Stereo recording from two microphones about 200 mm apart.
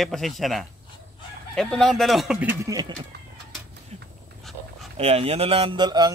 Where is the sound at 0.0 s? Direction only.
Centre (ahead or behind).